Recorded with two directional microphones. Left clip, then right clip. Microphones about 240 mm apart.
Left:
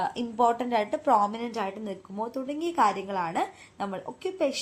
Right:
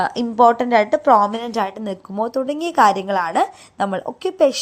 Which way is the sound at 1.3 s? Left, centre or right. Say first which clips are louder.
Right 10 dB; right.